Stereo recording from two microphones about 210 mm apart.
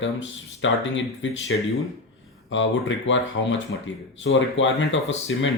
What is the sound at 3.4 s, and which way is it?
Speech, 75° left (ahead or behind).